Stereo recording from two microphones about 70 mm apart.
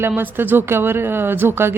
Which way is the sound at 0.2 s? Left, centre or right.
Right.